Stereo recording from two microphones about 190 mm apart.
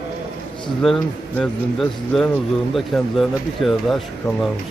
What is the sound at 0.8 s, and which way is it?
Speech, centre (ahead or behind).